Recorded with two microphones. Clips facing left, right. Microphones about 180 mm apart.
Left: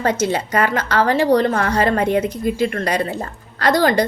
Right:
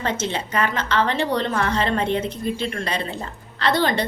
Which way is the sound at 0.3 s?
40° left (ahead or behind).